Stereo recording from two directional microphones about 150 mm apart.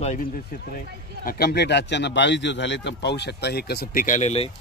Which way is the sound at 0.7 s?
75° left (ahead or behind).